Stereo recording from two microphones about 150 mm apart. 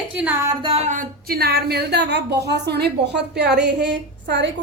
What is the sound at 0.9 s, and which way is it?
A woman's voice, 90° right.